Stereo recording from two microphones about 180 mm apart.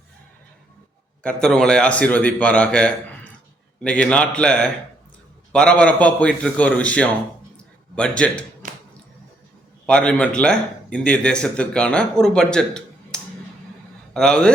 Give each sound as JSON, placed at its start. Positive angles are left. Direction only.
{"t": 1.2, "sound": "a man's voice", "side_deg": 5}
{"t": 7.5, "sound": "a sound", "side_deg": 5}
{"t": 9.8, "sound": "a man's voice", "side_deg": 5}